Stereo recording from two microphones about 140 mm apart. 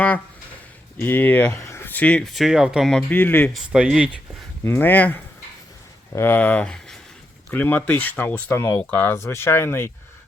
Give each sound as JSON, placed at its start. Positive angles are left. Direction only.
{"t": 0.9, "sound": "speech", "side_deg": 15}
{"t": 3.1, "sound": "speech", "side_deg": 10}
{"t": 3.5, "sound": "speech", "side_deg": 0}
{"t": 4.6, "sound": "speech", "side_deg": 15}